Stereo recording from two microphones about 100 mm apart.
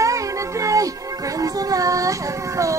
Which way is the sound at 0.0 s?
30° right (ahead or behind).